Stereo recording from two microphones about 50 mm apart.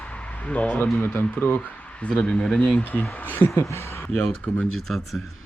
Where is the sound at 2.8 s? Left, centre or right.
Left.